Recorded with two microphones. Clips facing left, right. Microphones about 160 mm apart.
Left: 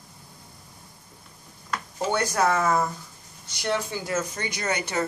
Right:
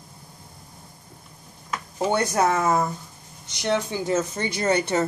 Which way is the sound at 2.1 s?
25° right (ahead or behind).